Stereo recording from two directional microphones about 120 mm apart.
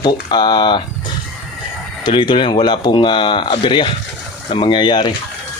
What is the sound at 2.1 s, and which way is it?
Speech, 40° left (ahead or behind).